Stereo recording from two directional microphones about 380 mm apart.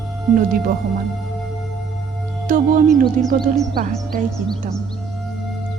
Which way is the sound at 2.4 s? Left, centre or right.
Centre.